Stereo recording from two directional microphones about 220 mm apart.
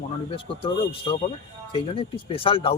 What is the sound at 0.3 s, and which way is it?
Speech, 25° left (ahead or behind).